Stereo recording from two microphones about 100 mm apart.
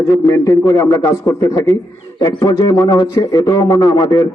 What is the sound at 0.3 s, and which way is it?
A man's voice, 30° left (ahead or behind).